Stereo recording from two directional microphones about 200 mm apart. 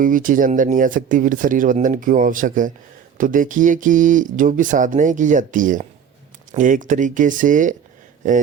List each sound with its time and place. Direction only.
0.0 s speech: 40° right (ahead or behind)